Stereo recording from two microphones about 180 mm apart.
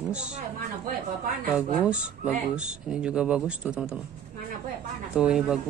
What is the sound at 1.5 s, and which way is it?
Speech, 5° right (ahead or behind).